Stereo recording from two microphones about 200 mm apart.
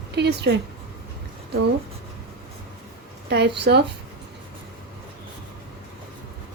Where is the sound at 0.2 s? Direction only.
55° right (ahead or behind).